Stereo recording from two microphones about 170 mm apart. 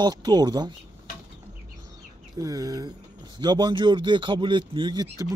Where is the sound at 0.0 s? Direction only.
25° right (ahead or behind).